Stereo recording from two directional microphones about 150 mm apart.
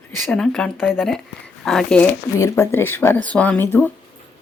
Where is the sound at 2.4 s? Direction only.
15° left (ahead or behind).